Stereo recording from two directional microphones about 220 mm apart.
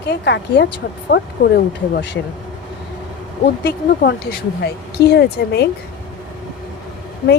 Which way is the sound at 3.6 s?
45° left (ahead or behind).